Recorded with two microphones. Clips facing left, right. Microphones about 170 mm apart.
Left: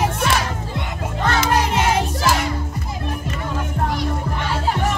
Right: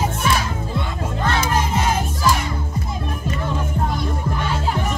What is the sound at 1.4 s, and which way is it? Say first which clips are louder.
Music: left 3 dB; 75° left (ahead or behind).